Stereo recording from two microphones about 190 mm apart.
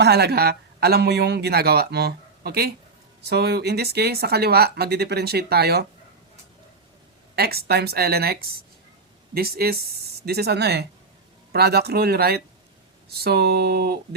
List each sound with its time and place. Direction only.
0.0 s speech: 60° right (ahead or behind)
7.3 s speech: 55° right (ahead or behind)